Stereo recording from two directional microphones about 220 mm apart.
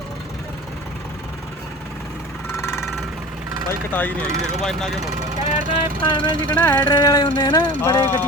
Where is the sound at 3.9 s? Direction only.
10° left (ahead or behind).